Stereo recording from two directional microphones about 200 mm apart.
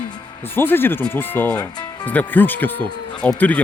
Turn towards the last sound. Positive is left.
turn(degrees=10)  # may be behind; listen again after turning